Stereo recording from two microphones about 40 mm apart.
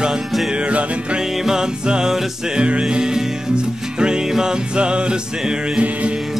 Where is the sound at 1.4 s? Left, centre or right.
Centre.